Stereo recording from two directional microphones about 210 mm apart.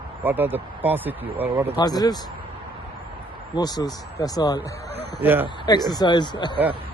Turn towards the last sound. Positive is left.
turn(degrees=20)  # may be behind; listen again after turning